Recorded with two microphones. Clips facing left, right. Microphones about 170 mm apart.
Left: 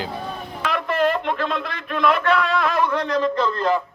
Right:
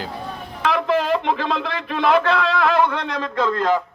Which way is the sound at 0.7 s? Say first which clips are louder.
Right 2 dB; 90° right.